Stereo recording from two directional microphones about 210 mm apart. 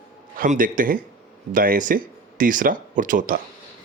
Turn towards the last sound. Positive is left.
turn(degrees=-40)  # may be behind; listen again after turning